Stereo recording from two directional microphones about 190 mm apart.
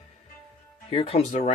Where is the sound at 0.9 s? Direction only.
30° left (ahead or behind).